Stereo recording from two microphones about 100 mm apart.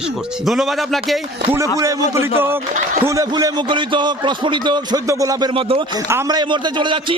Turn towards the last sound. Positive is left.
turn(degrees=-55)  # may be behind; listen again after turning